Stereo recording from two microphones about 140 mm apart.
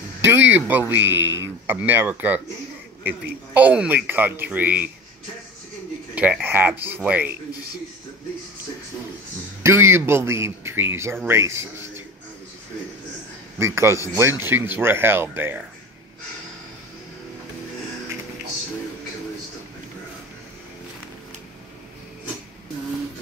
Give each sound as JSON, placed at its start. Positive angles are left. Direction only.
{"t": 0.2, "sound": "speech", "side_deg": -15}
{"t": 6.4, "sound": "speech", "side_deg": -15}
{"t": 9.6, "sound": "speech", "side_deg": -20}
{"t": 13.6, "sound": "speech", "side_deg": -20}